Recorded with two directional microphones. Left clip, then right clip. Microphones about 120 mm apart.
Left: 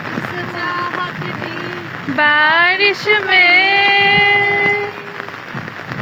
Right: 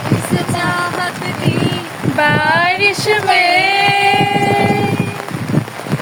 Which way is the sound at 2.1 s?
10° right (ahead or behind).